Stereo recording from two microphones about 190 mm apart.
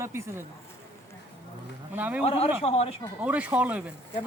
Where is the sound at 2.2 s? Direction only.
30° left (ahead or behind).